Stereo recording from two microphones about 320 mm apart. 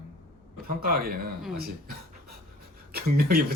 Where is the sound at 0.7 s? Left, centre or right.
Right.